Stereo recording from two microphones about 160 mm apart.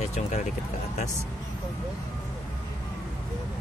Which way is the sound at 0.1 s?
50° left (ahead or behind).